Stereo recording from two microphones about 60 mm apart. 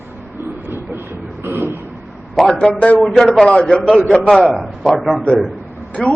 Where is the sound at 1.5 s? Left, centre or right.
Right.